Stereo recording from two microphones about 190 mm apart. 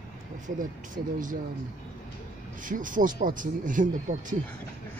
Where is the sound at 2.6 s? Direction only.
45° right (ahead or behind).